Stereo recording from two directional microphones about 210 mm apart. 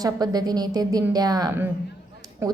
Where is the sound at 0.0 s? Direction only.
20° right (ahead or behind).